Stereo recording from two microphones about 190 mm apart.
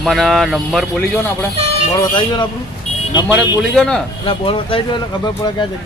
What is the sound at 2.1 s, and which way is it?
Speech, 25° left (ahead or behind).